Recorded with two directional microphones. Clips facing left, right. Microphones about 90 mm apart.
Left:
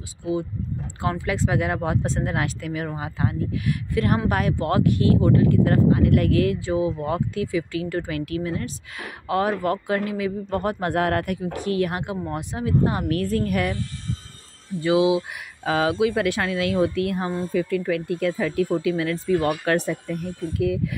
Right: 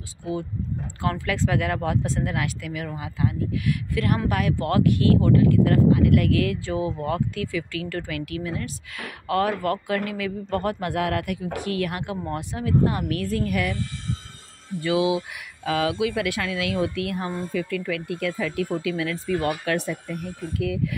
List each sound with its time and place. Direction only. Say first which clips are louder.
1.0 s speech: left 1 dB; 20° left (ahead or behind)
2.0 s speech: left 1 dB; 35° left (ahead or behind)
10.8 s speech: left 3 dB; 35° left (ahead or behind)
13.1 s speech: left 2 dB; 40° left (ahead or behind)
14.8 s speech: left 3 dB; 25° left (ahead or behind)
19.6 s speech: left 3 dB; 40° left (ahead or behind)
20.6 s speech: left 3 dB; 30° left (ahead or behind)